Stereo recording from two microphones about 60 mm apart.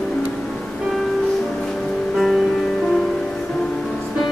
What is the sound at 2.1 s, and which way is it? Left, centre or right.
Music, centre.